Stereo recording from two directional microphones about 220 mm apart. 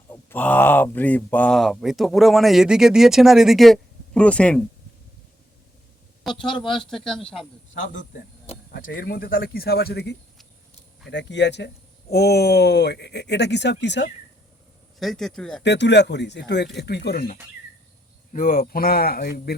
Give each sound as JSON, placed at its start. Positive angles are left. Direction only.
{"t": 0.1, "sound": "speech", "side_deg": 10}
{"t": 6.3, "sound": "speech", "side_deg": 0}
{"t": 8.1, "sound": "speech", "side_deg": 40}
{"t": 14.9, "sound": "speech", "side_deg": 0}
{"t": 15.6, "sound": "speech", "side_deg": 50}
{"t": 18.3, "sound": "speech", "side_deg": 40}